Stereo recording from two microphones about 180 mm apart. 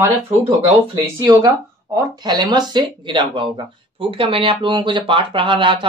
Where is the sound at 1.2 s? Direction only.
20° right (ahead or behind).